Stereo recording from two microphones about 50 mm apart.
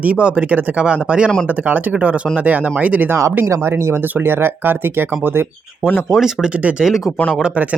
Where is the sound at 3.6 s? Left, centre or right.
Right.